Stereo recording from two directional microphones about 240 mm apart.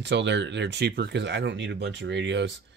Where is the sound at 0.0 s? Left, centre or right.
Right.